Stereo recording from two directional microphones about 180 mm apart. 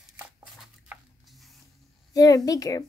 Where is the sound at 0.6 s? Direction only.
Centre (ahead or behind).